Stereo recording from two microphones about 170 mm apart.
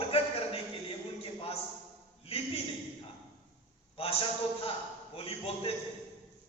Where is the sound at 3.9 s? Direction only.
35° left (ahead or behind).